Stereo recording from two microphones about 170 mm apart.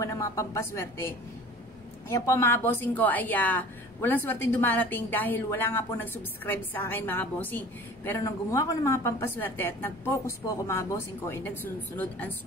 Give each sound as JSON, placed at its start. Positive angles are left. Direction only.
{"t": 0.0, "sound": "a woman's voice", "side_deg": 20}